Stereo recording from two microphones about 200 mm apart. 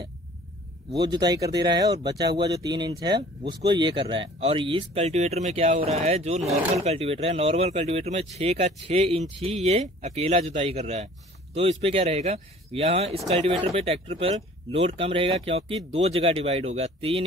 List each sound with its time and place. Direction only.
1.0 s speech: 20° right (ahead or behind)